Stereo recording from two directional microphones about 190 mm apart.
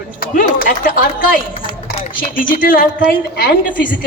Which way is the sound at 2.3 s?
45° left (ahead or behind).